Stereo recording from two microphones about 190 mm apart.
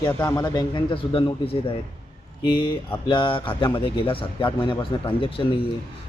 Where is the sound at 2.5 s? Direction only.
25° left (ahead or behind).